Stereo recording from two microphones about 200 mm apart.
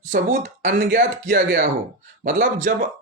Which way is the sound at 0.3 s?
40° right (ahead or behind).